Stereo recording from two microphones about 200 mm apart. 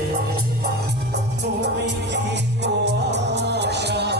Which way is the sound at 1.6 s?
60° right (ahead or behind).